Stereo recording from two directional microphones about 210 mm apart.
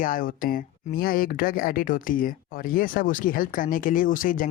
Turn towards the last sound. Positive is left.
turn(degrees=40)  # may be behind; listen again after turning